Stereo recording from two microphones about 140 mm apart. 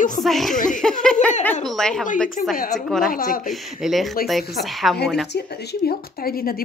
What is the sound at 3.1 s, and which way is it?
Speech, 90° left.